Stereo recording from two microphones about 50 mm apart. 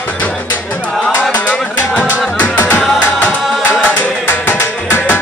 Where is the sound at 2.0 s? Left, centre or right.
Left.